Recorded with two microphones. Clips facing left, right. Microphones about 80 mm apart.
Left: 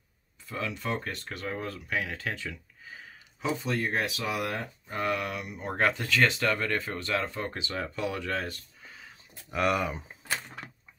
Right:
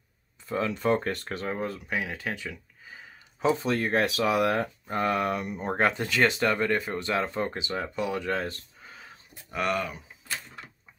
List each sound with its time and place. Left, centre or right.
0.5 s speech: right
1.4 s speech: right
3.6 s speech: right
4.8 s speech: right
9.5 s speech: centre